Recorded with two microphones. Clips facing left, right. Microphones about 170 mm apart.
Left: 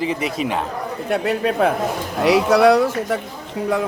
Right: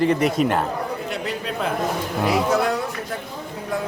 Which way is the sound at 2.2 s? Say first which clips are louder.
Left 7 dB; 90° left.